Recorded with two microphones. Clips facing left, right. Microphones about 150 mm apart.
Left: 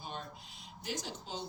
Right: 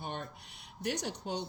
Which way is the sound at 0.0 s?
60° right (ahead or behind).